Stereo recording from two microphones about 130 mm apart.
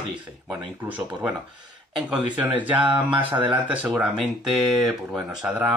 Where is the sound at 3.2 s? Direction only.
40° right (ahead or behind).